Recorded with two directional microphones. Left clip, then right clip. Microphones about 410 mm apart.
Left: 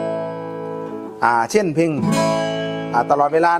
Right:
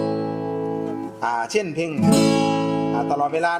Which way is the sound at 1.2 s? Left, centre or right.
Left.